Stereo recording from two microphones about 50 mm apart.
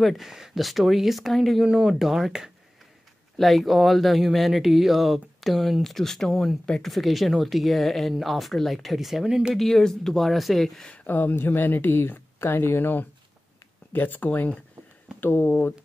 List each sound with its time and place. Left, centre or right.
0.0 s speech: centre
1.6 s speech: centre
3.3 s speech: centre
9.6 s speech: centre
11.1 s speech: left